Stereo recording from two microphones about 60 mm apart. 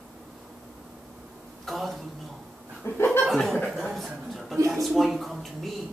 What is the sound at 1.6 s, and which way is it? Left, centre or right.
Speech, centre.